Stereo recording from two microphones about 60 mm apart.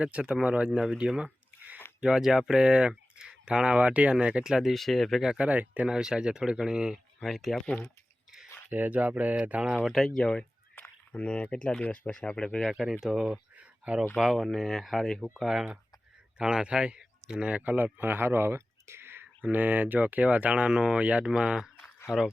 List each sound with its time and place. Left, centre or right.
0.0 s speech: centre
4.7 s speech: centre
5.5 s speech: right
5.9 s speech: centre
7.3 s speech: centre
8.7 s speech: right
9.8 s speech: centre
10.8 s a sound: left
11.5 s speech: centre
12.7 s speech: centre
13.6 s a sound: right
14.2 s speech: centre
17.6 s speech: right
19.4 s speech: right; by 21.7 s centre